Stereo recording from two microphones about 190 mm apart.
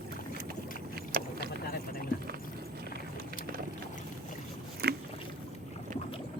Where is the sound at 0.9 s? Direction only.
55° right (ahead or behind).